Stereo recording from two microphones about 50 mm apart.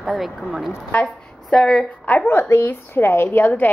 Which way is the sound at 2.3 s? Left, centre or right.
Left.